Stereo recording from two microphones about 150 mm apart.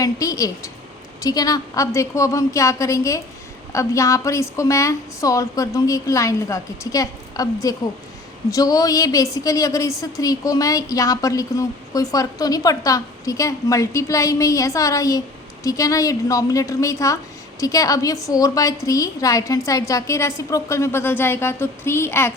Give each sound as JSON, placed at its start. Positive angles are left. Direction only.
{"t": 0.0, "sound": "a woman's voice", "side_deg": 25}